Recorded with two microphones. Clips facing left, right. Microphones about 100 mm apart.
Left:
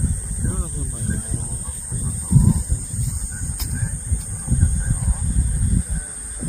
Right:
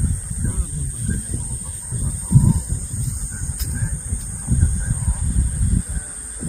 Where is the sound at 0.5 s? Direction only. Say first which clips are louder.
Left 1 dB; 35° left (ahead or behind).